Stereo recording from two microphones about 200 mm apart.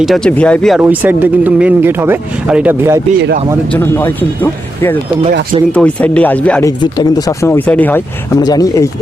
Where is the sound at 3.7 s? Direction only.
10° left (ahead or behind).